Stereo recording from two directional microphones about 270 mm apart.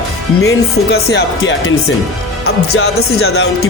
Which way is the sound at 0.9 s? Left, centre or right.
Left.